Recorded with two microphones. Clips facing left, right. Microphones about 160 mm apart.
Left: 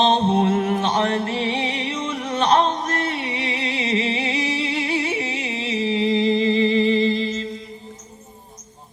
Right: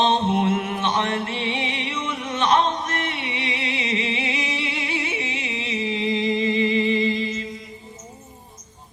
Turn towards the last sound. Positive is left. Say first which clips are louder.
# left 3 dB
turn(degrees=30)  # may be behind; listen again after turning